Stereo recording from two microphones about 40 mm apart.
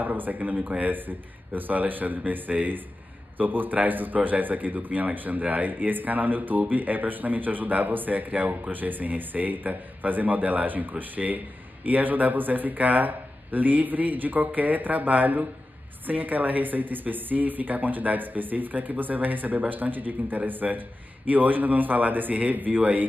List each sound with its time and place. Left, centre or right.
0.0 s speech: right